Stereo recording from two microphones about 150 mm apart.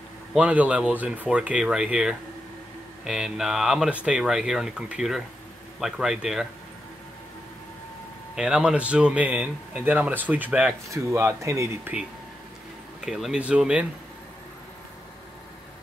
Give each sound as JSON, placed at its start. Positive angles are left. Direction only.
{"t": 0.3, "sound": "speech", "side_deg": -10}
{"t": 8.4, "sound": "speech", "side_deg": -5}
{"t": 13.0, "sound": "speech", "side_deg": -5}